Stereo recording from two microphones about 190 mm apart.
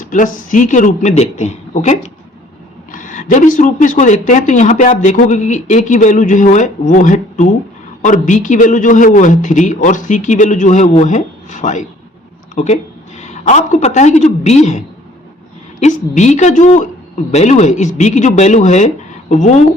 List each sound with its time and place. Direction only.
0.0 s a woman's voice: 45° left (ahead or behind)
13.1 s a woman's voice: 35° left (ahead or behind)